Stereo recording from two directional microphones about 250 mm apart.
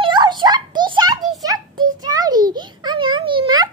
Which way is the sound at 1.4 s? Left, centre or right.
Centre.